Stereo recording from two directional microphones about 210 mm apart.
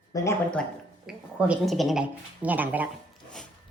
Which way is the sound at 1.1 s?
5° right (ahead or behind).